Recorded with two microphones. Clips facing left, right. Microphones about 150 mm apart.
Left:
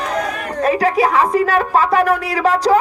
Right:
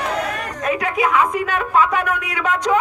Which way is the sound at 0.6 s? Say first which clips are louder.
Left 5 dB; 35° left (ahead or behind).